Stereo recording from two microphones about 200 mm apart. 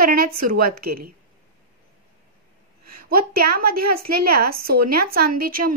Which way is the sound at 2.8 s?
50° right (ahead or behind).